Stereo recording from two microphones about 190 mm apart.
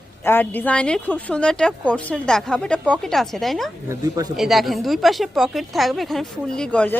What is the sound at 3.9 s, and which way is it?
Speech, 15° right (ahead or behind).